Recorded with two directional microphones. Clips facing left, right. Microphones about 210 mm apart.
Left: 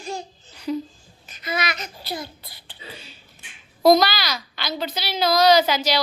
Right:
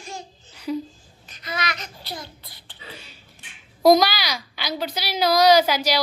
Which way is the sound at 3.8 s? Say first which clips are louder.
Even; 10° right (ahead or behind).